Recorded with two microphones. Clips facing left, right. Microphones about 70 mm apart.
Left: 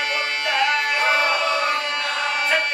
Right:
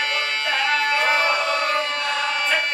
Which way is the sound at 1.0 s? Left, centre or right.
Left.